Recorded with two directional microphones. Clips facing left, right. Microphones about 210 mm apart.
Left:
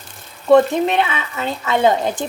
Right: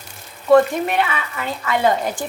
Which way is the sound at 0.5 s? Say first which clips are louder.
Left 1 dB; 25° left (ahead or behind).